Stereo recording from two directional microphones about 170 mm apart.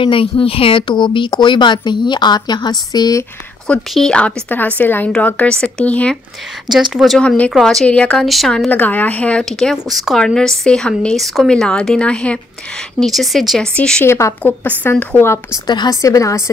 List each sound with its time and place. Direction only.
0.0 s speech: 30° left (ahead or behind)
3.6 s speech: 5° left (ahead or behind)